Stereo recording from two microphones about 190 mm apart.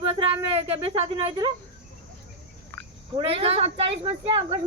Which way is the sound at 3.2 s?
30° right (ahead or behind).